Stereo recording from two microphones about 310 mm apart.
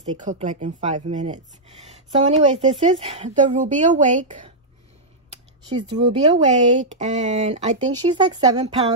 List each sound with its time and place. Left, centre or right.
0.2 s speech: right
5.7 s speech: centre